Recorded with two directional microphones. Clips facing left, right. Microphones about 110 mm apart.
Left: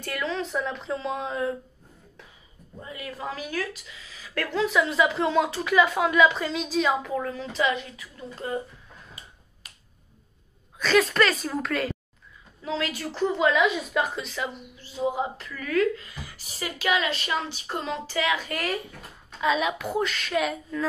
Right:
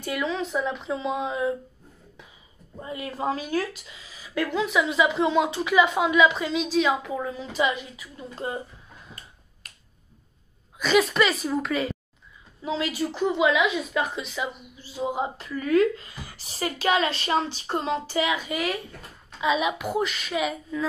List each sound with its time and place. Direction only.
0.0 s speech: 10° right (ahead or behind)
2.8 s a woman's voice: 25° right (ahead or behind)
4.5 s a woman's voice: 5° right (ahead or behind); by 8.5 s 20° right (ahead or behind)
10.8 s speech: 5° right (ahead or behind)
12.6 s a woman's voice: 20° right (ahead or behind)
13.1 s speech: 5° right (ahead or behind)
15.0 s a woman's voice: 20° right (ahead or behind)
18.5 s a woman's voice: 5° right (ahead or behind)